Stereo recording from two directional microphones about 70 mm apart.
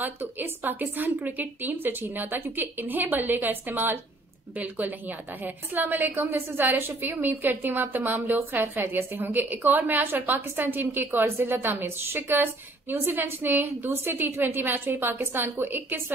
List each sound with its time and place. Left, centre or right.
0.0 s a woman's voice: right